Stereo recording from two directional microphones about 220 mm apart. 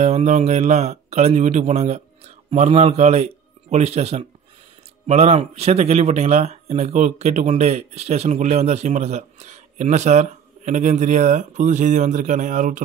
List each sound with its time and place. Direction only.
0.0 s speech: 30° right (ahead or behind)